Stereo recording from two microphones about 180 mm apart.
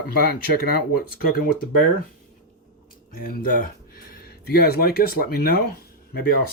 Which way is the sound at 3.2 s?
50° left (ahead or behind).